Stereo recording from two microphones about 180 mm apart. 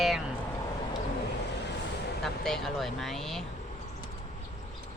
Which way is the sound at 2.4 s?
Centre (ahead or behind).